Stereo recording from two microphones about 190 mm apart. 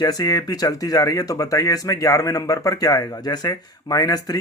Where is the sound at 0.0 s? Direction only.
20° left (ahead or behind).